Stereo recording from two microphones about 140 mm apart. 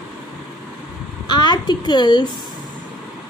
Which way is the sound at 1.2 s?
30° left (ahead or behind).